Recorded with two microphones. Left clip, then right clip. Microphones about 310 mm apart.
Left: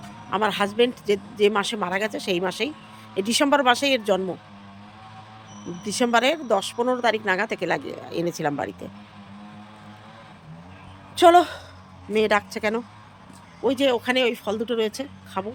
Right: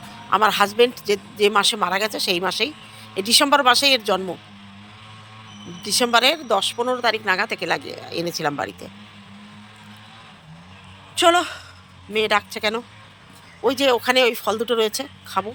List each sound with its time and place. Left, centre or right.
0.3 s a woman's voice: centre
5.8 s a woman's voice: centre
11.1 s a woman's voice: centre